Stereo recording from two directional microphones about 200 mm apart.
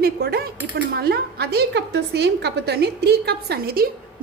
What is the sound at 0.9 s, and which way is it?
A woman's voice, 50° right (ahead or behind).